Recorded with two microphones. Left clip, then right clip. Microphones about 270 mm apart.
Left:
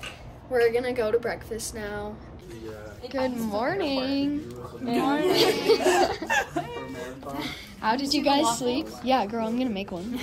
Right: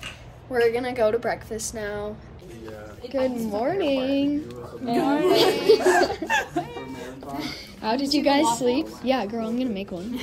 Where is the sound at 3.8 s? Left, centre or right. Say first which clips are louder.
Right 4 dB; left.